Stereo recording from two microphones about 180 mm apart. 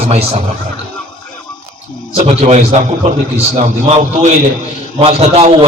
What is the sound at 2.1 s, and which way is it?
A man's voice, 35° right (ahead or behind).